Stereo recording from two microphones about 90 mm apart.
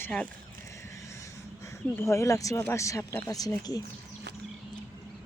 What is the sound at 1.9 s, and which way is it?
Speech, 30° left (ahead or behind).